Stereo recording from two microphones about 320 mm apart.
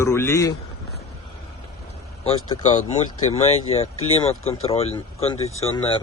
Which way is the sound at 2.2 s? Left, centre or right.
Centre.